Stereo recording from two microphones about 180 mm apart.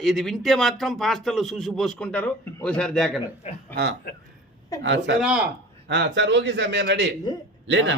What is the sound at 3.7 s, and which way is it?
Speech, 65° right (ahead or behind).